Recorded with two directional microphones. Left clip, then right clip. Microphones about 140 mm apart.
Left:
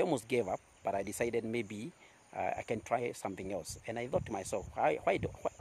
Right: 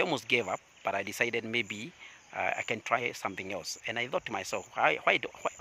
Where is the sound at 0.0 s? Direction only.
25° left (ahead or behind).